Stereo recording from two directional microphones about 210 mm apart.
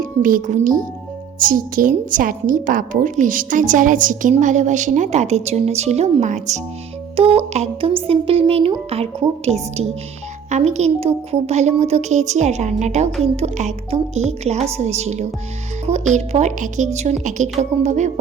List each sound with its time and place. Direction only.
0.0 s a woman's voice: 40° right (ahead or behind)